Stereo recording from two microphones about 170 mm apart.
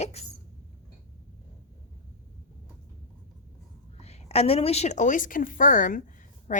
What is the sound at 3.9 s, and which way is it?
A woman's voice, 40° left (ahead or behind).